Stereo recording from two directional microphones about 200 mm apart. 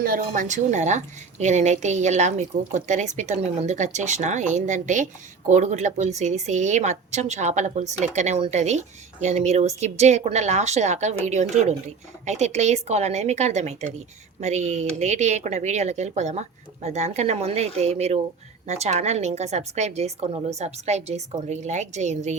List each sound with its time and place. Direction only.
0.0 s a woman's voice: 45° right (ahead or behind)